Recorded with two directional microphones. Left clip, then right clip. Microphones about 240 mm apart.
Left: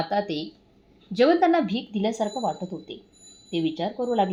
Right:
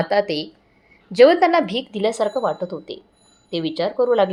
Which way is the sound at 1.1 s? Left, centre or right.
Centre.